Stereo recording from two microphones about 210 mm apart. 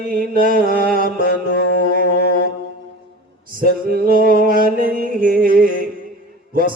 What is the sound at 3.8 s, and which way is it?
Mantra, 45° right (ahead or behind).